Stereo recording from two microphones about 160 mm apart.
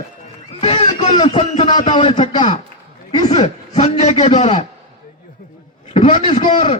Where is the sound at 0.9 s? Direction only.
50° left (ahead or behind).